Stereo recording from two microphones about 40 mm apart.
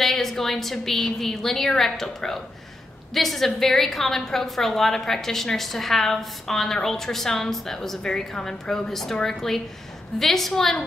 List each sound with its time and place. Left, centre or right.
0.0 s a woman's voice: centre